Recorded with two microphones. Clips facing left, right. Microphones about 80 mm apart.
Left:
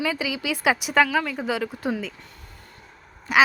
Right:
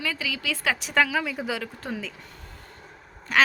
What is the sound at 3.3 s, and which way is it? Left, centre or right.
Speech, centre.